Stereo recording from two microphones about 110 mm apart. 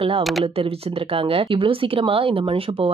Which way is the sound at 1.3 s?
50° right (ahead or behind).